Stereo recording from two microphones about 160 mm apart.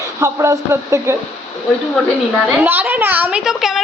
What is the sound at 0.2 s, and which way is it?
Speech, 20° right (ahead or behind).